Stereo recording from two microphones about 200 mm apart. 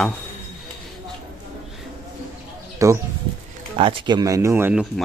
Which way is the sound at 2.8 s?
15° right (ahead or behind).